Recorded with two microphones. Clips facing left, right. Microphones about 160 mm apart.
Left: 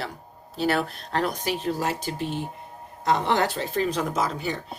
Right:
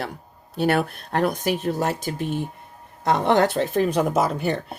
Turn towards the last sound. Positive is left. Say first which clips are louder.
# right 5 dB
turn(degrees=-60)  # may be behind; listen again after turning